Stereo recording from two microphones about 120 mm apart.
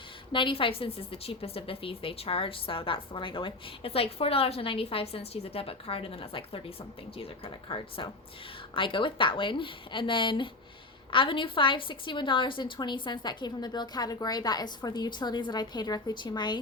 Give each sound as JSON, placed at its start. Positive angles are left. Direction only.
{"t": 0.3, "sound": "a woman's voice", "side_deg": 45}